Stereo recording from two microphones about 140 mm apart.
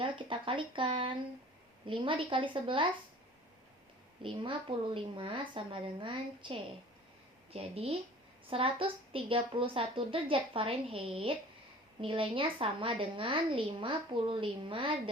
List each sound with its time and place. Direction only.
0.0 s a woman's voice: 35° right (ahead or behind)
4.2 s a woman's voice: 35° right (ahead or behind)